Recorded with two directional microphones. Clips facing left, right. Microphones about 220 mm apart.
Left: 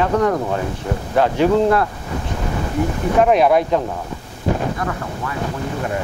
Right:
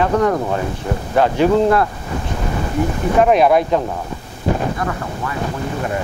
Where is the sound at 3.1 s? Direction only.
20° right (ahead or behind).